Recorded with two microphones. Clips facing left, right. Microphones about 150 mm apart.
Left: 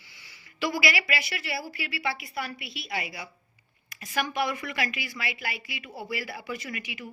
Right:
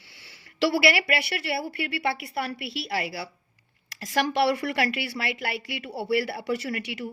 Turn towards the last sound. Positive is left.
turn(degrees=-70)  # may be behind; listen again after turning